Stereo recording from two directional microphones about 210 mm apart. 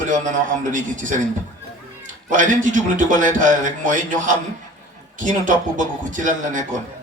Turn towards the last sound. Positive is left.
turn(degrees=-35)  # may be behind; listen again after turning